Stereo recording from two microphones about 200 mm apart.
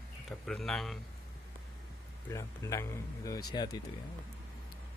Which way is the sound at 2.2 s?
15° left (ahead or behind).